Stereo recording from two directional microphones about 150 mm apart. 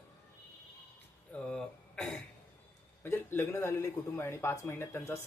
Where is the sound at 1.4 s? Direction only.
5° left (ahead or behind).